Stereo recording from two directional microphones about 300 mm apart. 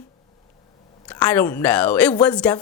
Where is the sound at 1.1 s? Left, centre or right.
Centre.